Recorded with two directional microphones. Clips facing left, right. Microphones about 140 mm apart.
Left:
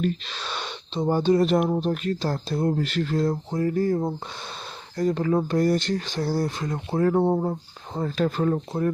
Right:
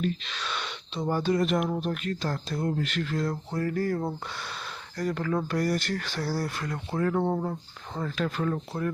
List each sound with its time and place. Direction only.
0.0 s speech: 40° left (ahead or behind)